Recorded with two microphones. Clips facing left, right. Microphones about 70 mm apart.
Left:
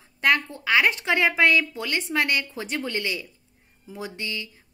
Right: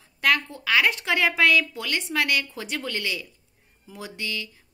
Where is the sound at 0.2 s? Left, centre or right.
Left.